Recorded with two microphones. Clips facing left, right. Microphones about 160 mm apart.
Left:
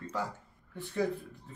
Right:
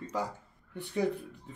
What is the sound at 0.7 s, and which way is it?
Speech, 15° right (ahead or behind).